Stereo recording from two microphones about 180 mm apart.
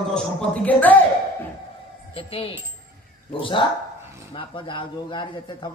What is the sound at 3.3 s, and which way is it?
A man's voice, 30° left (ahead or behind).